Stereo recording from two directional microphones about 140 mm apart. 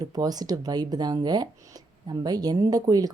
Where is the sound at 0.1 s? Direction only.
30° right (ahead or behind).